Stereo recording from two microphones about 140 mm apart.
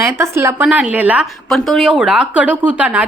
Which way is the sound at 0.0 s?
20° right (ahead or behind).